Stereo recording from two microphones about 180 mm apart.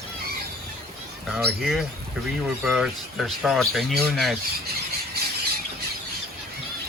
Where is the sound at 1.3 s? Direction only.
Centre (ahead or behind).